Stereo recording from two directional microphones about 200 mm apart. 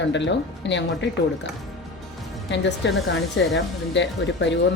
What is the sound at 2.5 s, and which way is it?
Speech, 60° left (ahead or behind).